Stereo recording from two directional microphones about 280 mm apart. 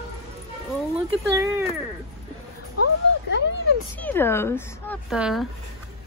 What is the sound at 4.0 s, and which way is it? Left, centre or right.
Speech, centre.